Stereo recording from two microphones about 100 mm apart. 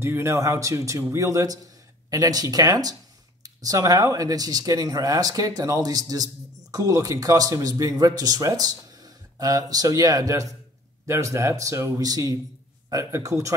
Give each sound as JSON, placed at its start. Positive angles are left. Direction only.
{"t": 0.0, "sound": "speech", "side_deg": -25}